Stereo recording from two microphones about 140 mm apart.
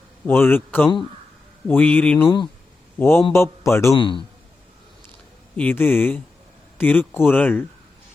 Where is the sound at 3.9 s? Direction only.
35° left (ahead or behind).